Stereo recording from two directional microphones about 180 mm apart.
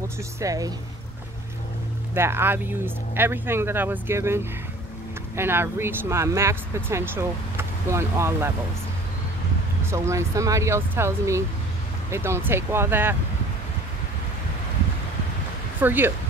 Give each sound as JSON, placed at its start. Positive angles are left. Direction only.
{"t": 0.4, "sound": "speech", "side_deg": -20}
{"t": 2.1, "sound": "speech", "side_deg": -15}
{"t": 9.8, "sound": "speech", "side_deg": -15}
{"t": 15.8, "sound": "speech", "side_deg": -10}